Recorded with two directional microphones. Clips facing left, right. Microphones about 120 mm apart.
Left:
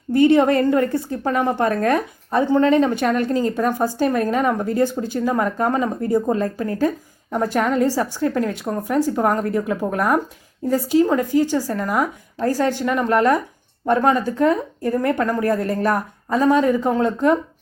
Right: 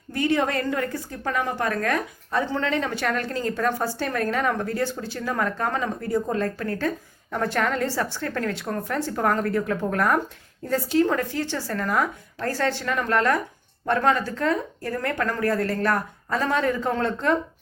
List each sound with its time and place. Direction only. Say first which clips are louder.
0.1 s a woman's voice: left 9 dB; 20° left (ahead or behind)